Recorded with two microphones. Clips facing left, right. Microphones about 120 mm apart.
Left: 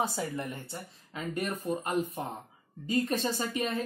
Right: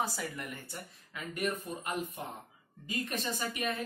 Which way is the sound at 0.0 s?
30° left (ahead or behind).